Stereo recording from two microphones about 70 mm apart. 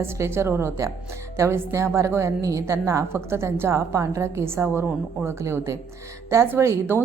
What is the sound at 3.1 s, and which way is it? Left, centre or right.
A woman's voice, right.